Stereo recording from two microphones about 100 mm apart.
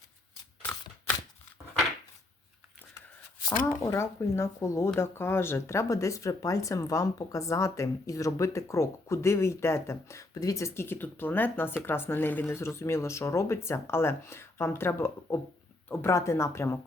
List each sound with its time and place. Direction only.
3.7 s speech: 25° left (ahead or behind)